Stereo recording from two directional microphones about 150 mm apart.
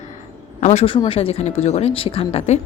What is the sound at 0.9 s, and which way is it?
Speech, 35° left (ahead or behind).